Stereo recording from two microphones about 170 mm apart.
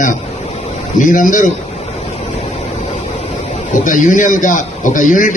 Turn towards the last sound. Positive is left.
turn(degrees=50)  # may be behind; listen again after turning